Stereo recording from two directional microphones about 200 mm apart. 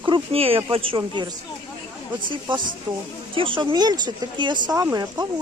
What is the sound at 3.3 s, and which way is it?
Speech, 25° right (ahead or behind).